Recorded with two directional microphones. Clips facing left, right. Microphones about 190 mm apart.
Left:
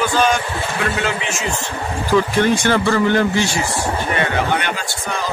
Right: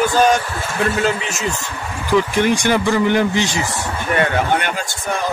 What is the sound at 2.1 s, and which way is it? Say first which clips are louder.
Speech: even; 15° right (ahead or behind).